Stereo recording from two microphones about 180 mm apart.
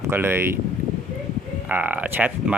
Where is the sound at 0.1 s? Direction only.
10° right (ahead or behind).